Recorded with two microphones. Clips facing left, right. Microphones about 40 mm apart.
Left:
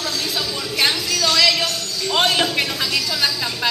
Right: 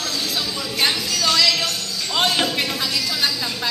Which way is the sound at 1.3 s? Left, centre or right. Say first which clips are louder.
Left 2 dB; left.